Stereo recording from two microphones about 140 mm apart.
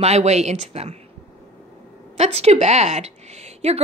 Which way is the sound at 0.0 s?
50° right (ahead or behind).